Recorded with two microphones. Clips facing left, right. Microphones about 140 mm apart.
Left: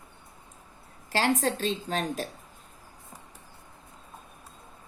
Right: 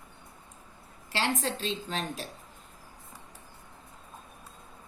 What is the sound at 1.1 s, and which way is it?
A woman's voice, 45° left (ahead or behind).